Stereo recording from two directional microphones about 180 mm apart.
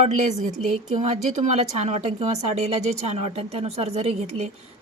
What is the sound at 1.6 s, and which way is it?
A woman's voice, 35° right (ahead or behind).